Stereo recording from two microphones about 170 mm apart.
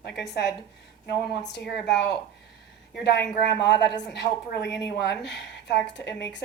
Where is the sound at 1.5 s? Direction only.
75° left (ahead or behind).